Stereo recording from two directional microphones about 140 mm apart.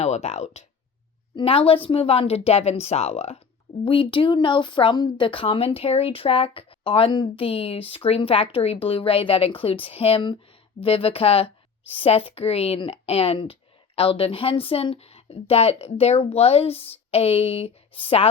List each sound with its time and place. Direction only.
0.0 s speech: 50° left (ahead or behind)
1.4 s a woman's voice: 40° left (ahead or behind)